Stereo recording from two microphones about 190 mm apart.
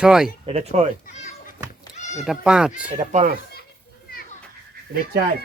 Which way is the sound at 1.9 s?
35° left (ahead or behind).